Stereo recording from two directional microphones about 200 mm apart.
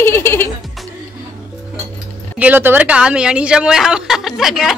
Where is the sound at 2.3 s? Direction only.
10° right (ahead or behind).